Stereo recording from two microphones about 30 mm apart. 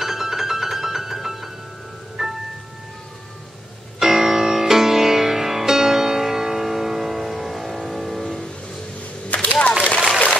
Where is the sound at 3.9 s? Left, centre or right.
Centre.